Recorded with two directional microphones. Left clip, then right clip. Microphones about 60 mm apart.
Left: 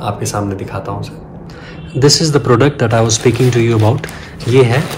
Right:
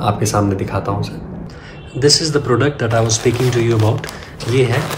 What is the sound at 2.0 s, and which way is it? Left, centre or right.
Speech, right.